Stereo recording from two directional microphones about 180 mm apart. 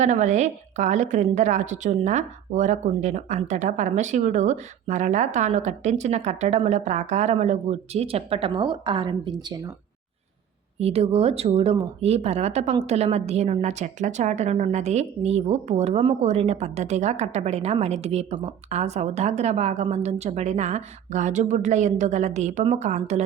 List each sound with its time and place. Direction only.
0.0 s a woman's voice: 40° right (ahead or behind); by 9.6 s 25° right (ahead or behind)
10.8 s a woman's voice: 35° right (ahead or behind)